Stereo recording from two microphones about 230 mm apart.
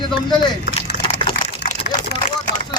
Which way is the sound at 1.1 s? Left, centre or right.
Left.